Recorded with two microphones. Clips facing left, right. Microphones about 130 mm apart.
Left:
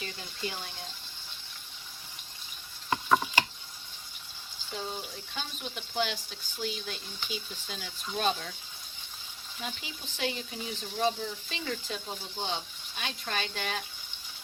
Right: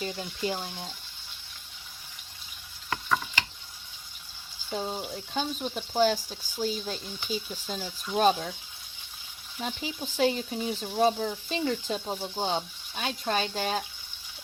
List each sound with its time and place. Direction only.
0.0 s speech: 25° right (ahead or behind)
2.9 s mechanisms: 25° left (ahead or behind)
4.7 s speech: 40° right (ahead or behind)
9.6 s speech: 40° right (ahead or behind)